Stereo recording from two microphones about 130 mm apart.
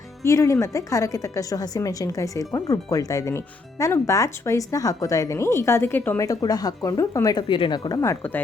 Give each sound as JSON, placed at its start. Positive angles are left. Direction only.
{"t": 0.2, "sound": "a woman's voice", "side_deg": 25}
{"t": 7.9, "sound": "a woman's voice", "side_deg": 25}